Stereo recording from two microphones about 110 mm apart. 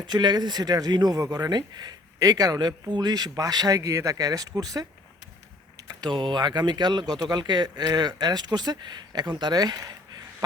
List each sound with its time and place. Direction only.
0.0 s speech: 40° right (ahead or behind)